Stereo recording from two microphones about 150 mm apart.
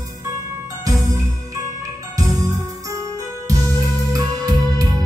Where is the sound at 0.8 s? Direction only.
20° right (ahead or behind).